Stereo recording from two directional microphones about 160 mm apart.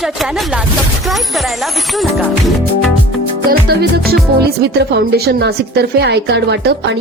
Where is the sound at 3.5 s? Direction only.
70° right (ahead or behind).